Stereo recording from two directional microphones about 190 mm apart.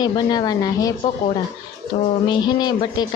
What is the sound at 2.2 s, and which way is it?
Speech, 25° left (ahead or behind).